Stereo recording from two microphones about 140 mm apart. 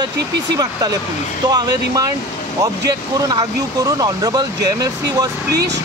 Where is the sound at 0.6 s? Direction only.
25° right (ahead or behind).